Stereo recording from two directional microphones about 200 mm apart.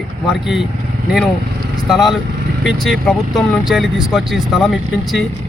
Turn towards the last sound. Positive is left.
turn(degrees=0)  # may be behind; listen again after turning